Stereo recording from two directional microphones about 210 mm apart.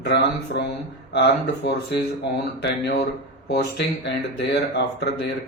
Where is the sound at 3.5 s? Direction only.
50° left (ahead or behind).